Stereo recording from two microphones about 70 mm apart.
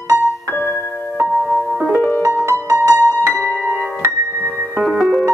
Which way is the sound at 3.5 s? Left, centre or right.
Right.